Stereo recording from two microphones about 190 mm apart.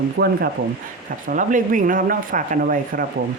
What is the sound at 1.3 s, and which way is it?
Speech, 45° right (ahead or behind).